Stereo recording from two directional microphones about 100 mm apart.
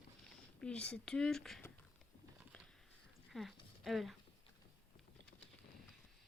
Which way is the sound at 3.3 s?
Centre (ahead or behind).